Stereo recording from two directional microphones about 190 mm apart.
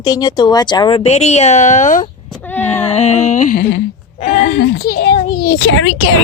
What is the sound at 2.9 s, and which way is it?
Speech, 35° left (ahead or behind).